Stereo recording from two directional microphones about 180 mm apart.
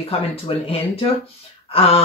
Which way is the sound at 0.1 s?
30° left (ahead or behind).